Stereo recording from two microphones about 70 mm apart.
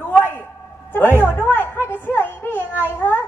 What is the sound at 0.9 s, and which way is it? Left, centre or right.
A woman's voice, left.